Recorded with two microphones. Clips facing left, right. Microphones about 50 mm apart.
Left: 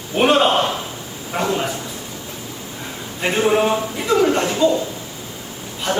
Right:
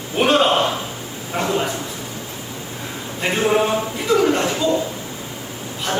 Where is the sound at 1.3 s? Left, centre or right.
Centre.